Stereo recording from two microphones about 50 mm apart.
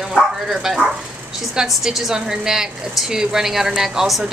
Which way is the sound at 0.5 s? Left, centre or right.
Centre.